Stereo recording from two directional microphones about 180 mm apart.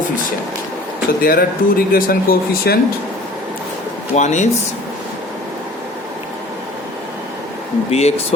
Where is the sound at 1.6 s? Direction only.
50° left (ahead or behind).